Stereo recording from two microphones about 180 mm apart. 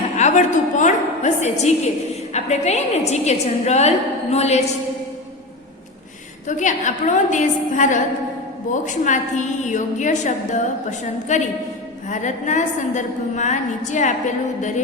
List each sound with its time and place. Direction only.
0.2 s a woman's voice: 40° left (ahead or behind)
6.5 s a woman's voice: 40° left (ahead or behind)